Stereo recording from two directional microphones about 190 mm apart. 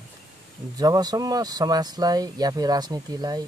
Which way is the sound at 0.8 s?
20° right (ahead or behind).